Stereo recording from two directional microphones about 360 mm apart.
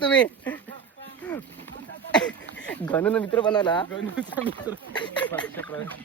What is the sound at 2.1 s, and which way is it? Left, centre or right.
A man's voice, centre.